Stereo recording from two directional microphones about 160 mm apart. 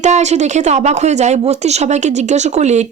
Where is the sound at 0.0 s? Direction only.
45° right (ahead or behind).